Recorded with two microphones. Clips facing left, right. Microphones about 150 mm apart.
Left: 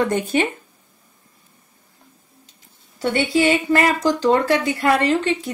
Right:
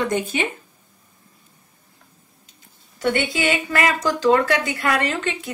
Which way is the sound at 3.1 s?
35° left (ahead or behind).